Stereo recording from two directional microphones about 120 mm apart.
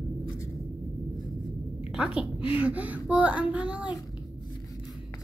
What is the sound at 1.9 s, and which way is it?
A child's voice, 5° right (ahead or behind).